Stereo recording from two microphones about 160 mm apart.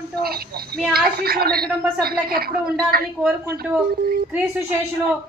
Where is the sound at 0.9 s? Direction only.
70° right (ahead or behind).